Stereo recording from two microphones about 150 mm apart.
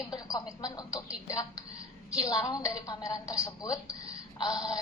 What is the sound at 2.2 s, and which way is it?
A woman's voice, 25° left (ahead or behind).